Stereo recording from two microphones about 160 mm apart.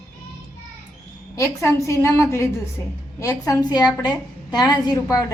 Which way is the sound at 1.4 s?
15° left (ahead or behind).